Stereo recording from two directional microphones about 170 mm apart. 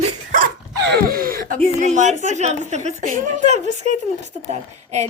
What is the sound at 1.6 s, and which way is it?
A woman's voice, 45° right (ahead or behind).